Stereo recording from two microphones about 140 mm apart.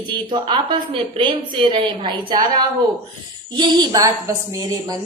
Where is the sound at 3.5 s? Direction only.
35° right (ahead or behind).